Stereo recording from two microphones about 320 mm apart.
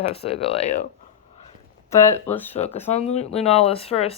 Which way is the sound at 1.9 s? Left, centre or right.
Centre.